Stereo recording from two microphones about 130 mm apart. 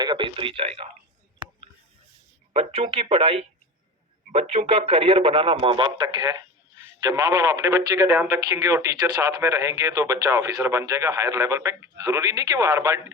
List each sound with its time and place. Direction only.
0.0 s speech: 35° right (ahead or behind)
2.5 s speech: 50° right (ahead or behind); by 13.0 s 25° right (ahead or behind)